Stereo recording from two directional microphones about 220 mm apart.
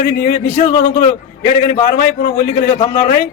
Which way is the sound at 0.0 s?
35° left (ahead or behind).